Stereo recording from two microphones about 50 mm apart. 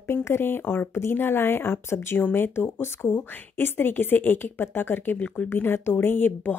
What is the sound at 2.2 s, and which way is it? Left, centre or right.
Speech, left.